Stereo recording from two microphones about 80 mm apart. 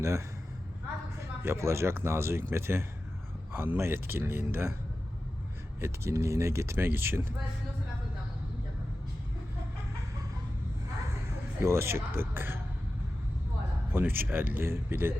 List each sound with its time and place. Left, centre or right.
0.0 s speech: right
5.8 s speech: right
11.3 s a man's voice: right
13.9 s speech: right